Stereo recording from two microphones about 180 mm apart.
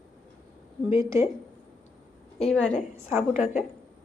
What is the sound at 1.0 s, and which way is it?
Speech, 15° right (ahead or behind).